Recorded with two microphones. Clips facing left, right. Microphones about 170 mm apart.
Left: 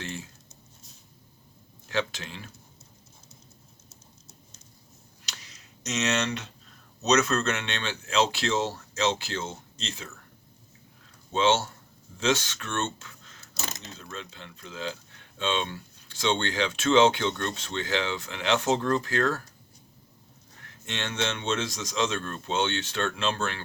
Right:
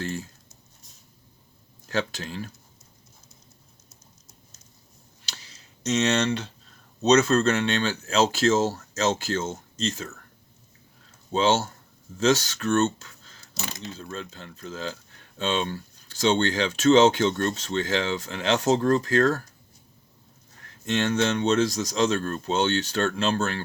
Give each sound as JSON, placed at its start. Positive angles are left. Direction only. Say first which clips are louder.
{"t": 0.0, "sound": "a sound", "louder": "right 6 dB", "side_deg": -40}
{"t": 1.9, "sound": "speech", "louder": "right 2 dB", "side_deg": -40}
{"t": 5.2, "sound": "tick", "louder": "right 1 dB", "side_deg": -30}
{"t": 7.0, "sound": "speech", "louder": "right 5 dB", "side_deg": -30}
{"t": 11.3, "sound": "speech", "louder": "right 2 dB", "side_deg": -35}
{"t": 20.7, "sound": "speech", "louder": "right 10 dB", "side_deg": -40}